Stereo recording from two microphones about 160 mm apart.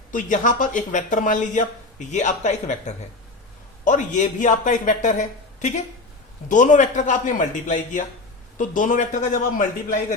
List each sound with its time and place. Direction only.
0.1 s speech: 55° left (ahead or behind)
6.5 s speech: 50° left (ahead or behind)